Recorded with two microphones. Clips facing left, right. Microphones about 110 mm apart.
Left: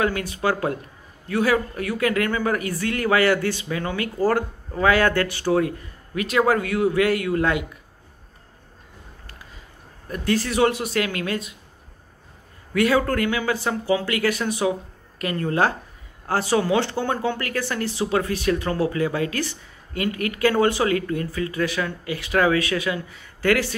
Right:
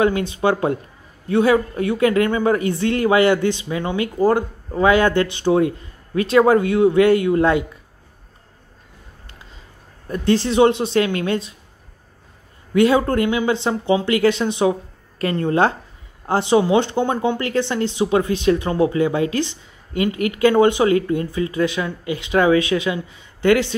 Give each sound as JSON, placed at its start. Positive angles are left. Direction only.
{"t": 0.0, "sound": "speech", "side_deg": -25}
{"t": 10.0, "sound": "speech", "side_deg": -30}
{"t": 12.7, "sound": "speech", "side_deg": -25}